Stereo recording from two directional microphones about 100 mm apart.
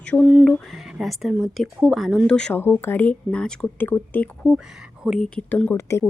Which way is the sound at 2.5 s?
20° left (ahead or behind).